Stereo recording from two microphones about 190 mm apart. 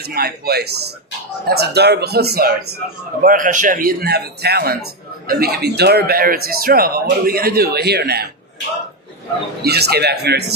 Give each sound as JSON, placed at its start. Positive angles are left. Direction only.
{"t": 0.0, "sound": "speech", "side_deg": -55}
{"t": 9.6, "sound": "speech", "side_deg": -60}